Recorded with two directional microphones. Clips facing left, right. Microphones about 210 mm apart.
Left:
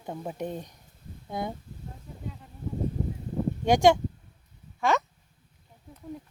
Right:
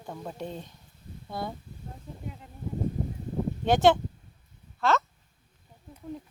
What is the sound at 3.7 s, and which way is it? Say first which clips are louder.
Speech: left 1 dB; 10° left (ahead or behind).